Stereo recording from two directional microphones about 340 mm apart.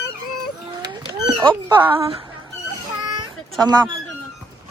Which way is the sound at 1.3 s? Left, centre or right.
Centre.